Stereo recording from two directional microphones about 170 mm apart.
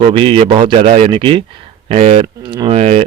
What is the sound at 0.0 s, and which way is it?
Speech, 30° right (ahead or behind).